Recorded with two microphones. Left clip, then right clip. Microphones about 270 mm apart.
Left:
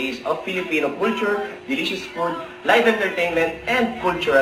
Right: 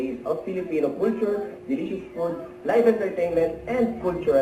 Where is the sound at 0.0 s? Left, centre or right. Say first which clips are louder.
Left 4 dB; centre.